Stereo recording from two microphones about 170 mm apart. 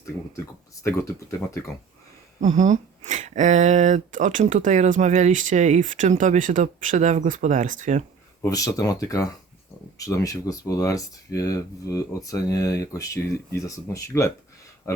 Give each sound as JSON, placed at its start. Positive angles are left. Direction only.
{"t": 0.8, "sound": "speech", "side_deg": 20}
{"t": 2.4, "sound": "speech", "side_deg": -45}
{"t": 8.4, "sound": "speech", "side_deg": 20}